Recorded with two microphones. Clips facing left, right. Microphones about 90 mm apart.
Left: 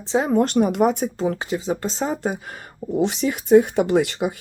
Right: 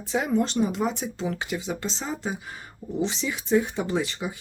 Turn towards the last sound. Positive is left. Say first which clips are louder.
# left 8 dB
turn(degrees=65)  # may be behind; listen again after turning